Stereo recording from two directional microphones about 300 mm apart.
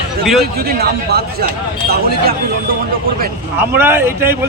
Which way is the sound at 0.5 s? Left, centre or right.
Right.